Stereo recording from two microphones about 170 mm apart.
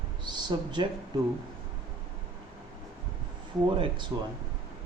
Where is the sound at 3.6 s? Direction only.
30° right (ahead or behind).